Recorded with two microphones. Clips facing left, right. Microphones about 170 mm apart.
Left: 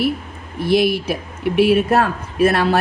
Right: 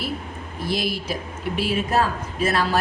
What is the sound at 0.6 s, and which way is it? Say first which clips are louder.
Speech: left 10 dB; 60° left (ahead or behind).